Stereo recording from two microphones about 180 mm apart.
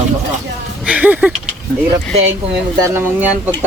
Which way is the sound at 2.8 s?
10° right (ahead or behind).